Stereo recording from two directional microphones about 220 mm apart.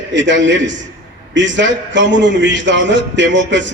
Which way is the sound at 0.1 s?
55° right (ahead or behind).